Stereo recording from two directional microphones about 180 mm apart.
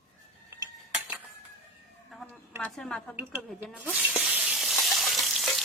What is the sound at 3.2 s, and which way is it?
Speech, 10° right (ahead or behind).